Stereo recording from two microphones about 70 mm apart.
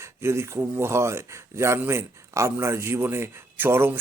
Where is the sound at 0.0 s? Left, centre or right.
Right.